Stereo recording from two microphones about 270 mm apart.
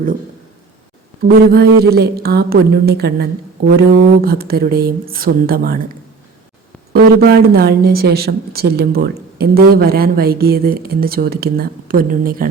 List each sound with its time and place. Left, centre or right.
1.2 s a woman's voice: right
6.9 s a woman's voice: right